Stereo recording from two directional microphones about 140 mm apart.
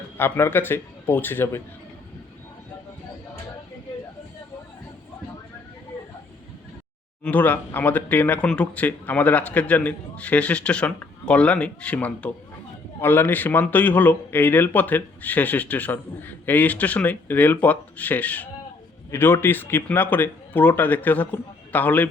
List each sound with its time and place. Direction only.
0.2 s speech: 15° left (ahead or behind)
7.3 s speech: 10° left (ahead or behind)